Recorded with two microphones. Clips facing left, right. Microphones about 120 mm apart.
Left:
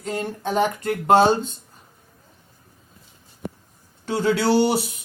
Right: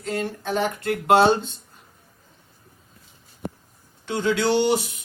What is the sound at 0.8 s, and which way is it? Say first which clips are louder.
Speech: even; 40° left (ahead or behind).